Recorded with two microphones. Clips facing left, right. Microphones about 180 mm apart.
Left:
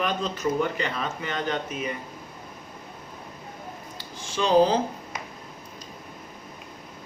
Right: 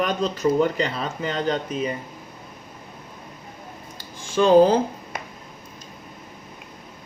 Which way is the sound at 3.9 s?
50° right (ahead or behind).